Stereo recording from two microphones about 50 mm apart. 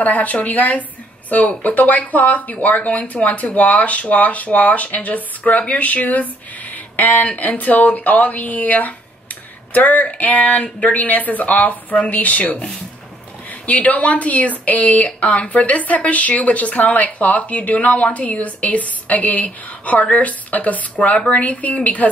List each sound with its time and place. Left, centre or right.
0.0 s speech: left
6.7 s a sound: left
7.3 s speech: left